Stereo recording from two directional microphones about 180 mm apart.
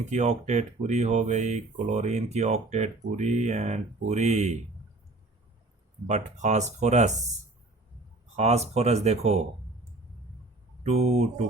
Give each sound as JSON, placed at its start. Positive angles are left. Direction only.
{"t": 0.1, "sound": "speech", "side_deg": -40}
{"t": 6.1, "sound": "speech", "side_deg": -40}
{"t": 8.4, "sound": "speech", "side_deg": -35}
{"t": 10.8, "sound": "speech", "side_deg": -35}